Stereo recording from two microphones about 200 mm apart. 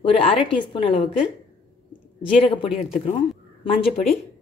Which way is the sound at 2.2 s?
25° left (ahead or behind).